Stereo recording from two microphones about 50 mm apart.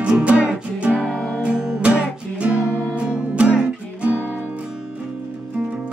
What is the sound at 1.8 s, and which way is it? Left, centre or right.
Music, right.